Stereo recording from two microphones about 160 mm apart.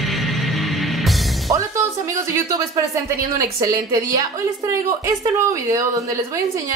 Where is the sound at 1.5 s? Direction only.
20° right (ahead or behind).